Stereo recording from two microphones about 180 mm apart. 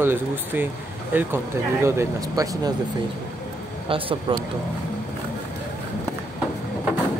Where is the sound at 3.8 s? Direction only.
30° right (ahead or behind).